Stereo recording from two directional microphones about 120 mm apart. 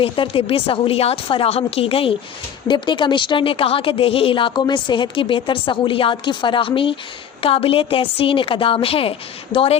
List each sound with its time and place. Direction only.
0.0 s speech: 50° left (ahead or behind)